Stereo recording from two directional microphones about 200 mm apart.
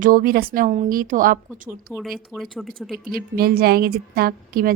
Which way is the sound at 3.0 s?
45° right (ahead or behind).